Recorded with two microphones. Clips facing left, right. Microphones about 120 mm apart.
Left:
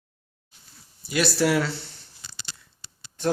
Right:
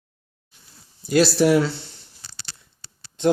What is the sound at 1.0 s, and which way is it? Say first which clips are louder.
Speech: right 7 dB; 40° right (ahead or behind).